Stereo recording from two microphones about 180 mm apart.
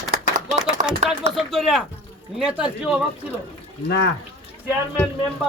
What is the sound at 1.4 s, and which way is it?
Speech, centre (ahead or behind).